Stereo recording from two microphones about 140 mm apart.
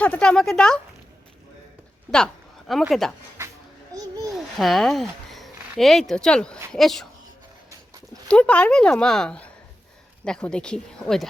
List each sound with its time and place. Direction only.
0.0 s a woman's voice: 10° left (ahead or behind)
2.0 s a sound: 5° left (ahead or behind)
2.9 s speech: centre (ahead or behind)
3.9 s a sound: 25° right (ahead or behind)
4.3 s speech: centre (ahead or behind)
8.3 s a woman's voice: 10° left (ahead or behind)